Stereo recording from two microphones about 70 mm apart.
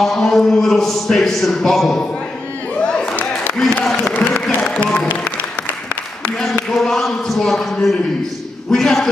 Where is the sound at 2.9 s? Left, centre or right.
Centre.